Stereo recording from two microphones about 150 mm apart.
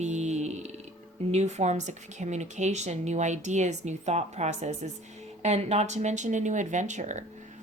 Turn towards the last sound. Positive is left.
turn(degrees=-55)  # may be behind; listen again after turning